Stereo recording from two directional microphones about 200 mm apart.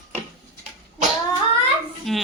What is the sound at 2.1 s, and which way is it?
Speech, centre (ahead or behind).